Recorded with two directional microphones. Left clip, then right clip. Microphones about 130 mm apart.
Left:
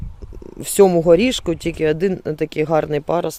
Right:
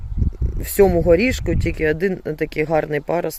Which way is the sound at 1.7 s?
10° left (ahead or behind).